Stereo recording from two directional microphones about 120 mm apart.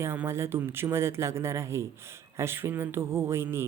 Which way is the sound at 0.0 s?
20° right (ahead or behind).